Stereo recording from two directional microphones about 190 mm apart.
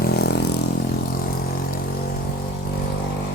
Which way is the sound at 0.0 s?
55° left (ahead or behind).